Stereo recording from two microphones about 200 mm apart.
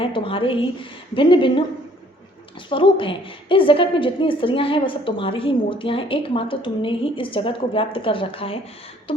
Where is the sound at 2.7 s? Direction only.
25° left (ahead or behind).